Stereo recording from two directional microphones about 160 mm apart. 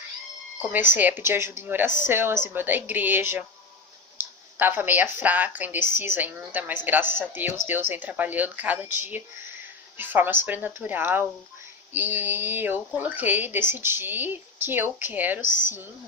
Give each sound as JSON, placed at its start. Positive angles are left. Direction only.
{"t": 0.6, "sound": "speech", "side_deg": -10}
{"t": 4.2, "sound": "a sound", "side_deg": -10}
{"t": 5.2, "sound": "speech", "side_deg": -10}
{"t": 15.4, "sound": "speech", "side_deg": 55}